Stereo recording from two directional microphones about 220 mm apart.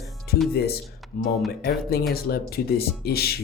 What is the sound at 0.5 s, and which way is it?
A woman's voice, 45° left (ahead or behind).